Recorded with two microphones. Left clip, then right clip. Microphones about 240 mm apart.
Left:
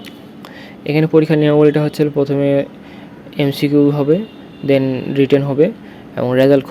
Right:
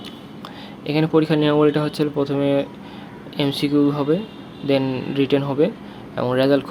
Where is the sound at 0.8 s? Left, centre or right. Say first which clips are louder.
Left 5 dB; left.